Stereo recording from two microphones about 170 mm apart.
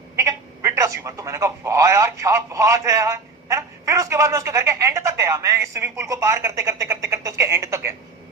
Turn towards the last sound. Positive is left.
turn(degrees=-15)  # may be behind; listen again after turning